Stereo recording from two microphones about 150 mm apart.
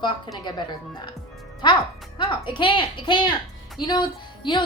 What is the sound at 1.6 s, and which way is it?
A woman's voice, 30° left (ahead or behind).